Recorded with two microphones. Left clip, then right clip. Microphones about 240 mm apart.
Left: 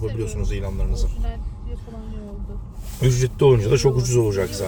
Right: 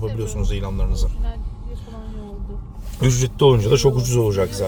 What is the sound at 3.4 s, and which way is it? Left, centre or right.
Speech, centre.